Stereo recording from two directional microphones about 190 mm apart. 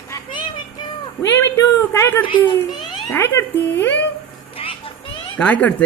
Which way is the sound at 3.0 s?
10° left (ahead or behind).